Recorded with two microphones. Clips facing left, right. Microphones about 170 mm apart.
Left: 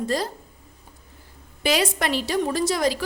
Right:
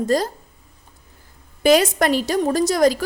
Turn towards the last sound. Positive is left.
turn(degrees=-45)  # may be behind; listen again after turning